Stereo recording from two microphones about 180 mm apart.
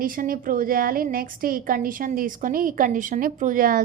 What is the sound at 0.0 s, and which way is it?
A woman's voice, 50° right (ahead or behind).